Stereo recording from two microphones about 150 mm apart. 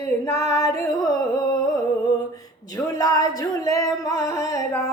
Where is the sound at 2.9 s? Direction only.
25° left (ahead or behind).